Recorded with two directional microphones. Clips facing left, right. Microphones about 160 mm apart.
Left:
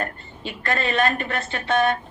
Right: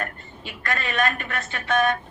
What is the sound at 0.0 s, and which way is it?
A woman's voice, 30° left (ahead or behind).